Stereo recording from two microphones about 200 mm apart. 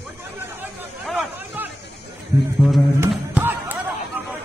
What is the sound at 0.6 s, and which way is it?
Chatter, 5° right (ahead or behind).